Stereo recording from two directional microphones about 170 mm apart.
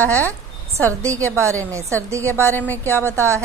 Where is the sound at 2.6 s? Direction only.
10° left (ahead or behind).